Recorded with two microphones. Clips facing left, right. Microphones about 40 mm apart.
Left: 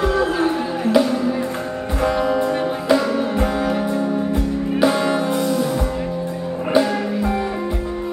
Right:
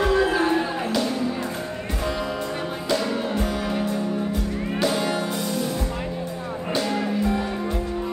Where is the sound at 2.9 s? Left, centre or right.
Left.